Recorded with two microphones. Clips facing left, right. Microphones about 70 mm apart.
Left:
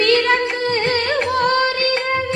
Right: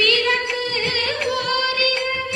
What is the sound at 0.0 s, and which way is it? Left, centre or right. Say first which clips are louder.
Music: left 4 dB; left.